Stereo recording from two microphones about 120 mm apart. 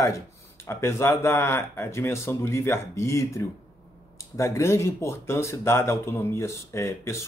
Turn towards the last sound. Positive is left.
turn(degrees=25)  # may be behind; listen again after turning